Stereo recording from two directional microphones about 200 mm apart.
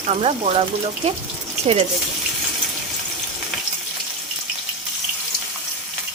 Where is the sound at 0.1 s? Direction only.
30° right (ahead or behind).